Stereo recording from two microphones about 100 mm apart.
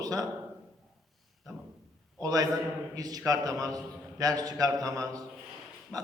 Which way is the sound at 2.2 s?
35° right (ahead or behind).